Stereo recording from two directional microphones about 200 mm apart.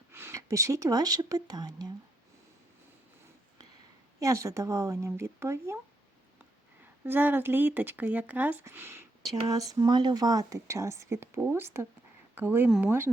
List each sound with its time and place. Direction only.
0.1 s speech: 10° right (ahead or behind)
4.2 s speech: 15° right (ahead or behind)
7.0 s speech: 10° right (ahead or behind)